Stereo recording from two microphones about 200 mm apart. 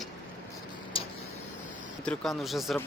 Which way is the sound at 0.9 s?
25° left (ahead or behind).